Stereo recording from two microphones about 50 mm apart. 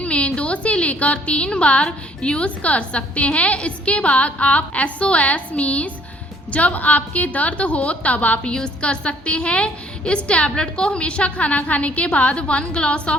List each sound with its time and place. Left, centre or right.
0.0 s a woman's voice: left
8.5 s a woman's voice: centre